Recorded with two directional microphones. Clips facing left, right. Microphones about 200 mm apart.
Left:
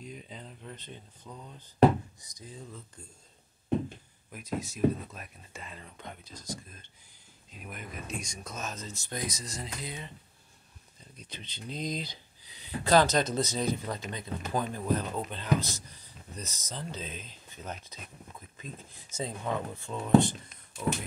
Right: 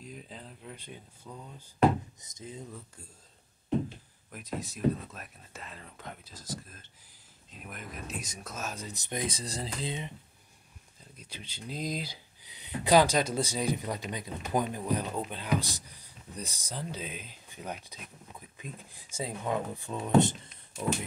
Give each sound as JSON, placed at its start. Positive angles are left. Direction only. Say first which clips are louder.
{"t": 0.0, "sound": "speech", "louder": "left 1 dB", "side_deg": 0}
{"t": 2.1, "sound": "speech", "louder": "right 3 dB", "side_deg": -25}
{"t": 4.3, "sound": "speech", "louder": "left 2 dB", "side_deg": 0}
{"t": 11.1, "sound": "speech", "louder": "even", "side_deg": -10}
{"t": 12.4, "sound": "speech", "louder": "right 1 dB", "side_deg": -20}